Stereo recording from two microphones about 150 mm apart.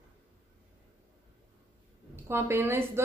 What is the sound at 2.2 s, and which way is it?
Speech, 15° right (ahead or behind).